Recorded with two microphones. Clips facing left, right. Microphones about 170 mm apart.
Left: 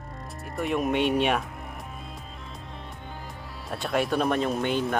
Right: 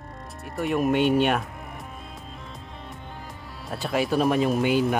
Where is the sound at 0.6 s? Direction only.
Centre (ahead or behind).